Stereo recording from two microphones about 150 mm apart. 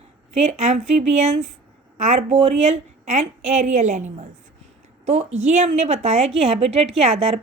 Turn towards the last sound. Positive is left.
turn(degrees=-45)  # may be behind; listen again after turning